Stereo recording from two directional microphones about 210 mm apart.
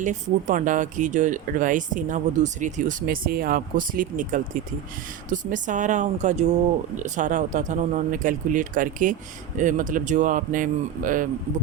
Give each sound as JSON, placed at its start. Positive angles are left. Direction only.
{"t": 0.0, "sound": "speech", "side_deg": -35}